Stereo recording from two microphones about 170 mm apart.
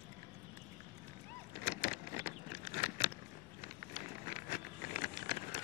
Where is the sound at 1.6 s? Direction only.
60° left (ahead or behind).